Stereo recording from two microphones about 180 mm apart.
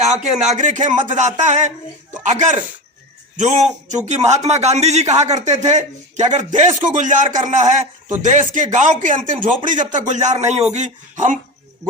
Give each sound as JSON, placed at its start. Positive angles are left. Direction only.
{"t": 0.4, "sound": "a man's voice", "side_deg": -40}